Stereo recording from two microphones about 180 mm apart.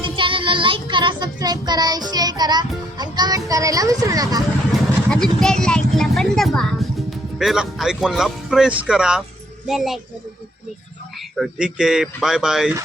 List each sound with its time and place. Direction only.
0.0 s child singing: 30° right (ahead or behind)
5.0 s a woman's voice: 5° left (ahead or behind)
11.3 s speech: 5° right (ahead or behind)